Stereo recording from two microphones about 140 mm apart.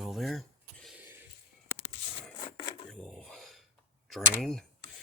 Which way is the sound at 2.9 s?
5° left (ahead or behind).